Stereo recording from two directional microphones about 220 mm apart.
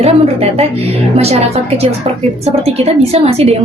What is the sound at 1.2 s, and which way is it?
A woman's voice, 30° right (ahead or behind).